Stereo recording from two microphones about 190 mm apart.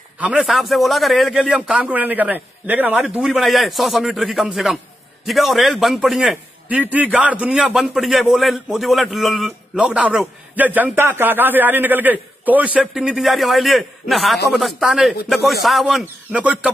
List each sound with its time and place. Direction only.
0.2 s a man's voice: 5° right (ahead or behind)